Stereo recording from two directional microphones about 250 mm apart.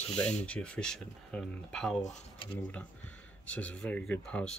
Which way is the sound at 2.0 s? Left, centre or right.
Left.